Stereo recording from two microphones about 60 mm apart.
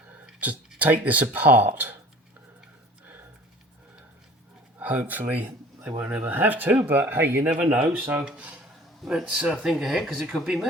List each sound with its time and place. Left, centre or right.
0.8 s speech: right
4.8 s speech: right
7.5 s speech: right
7.9 s speech: right
9.3 s speech: centre